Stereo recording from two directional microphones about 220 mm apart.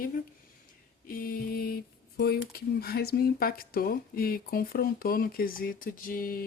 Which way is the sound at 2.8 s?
45° left (ahead or behind).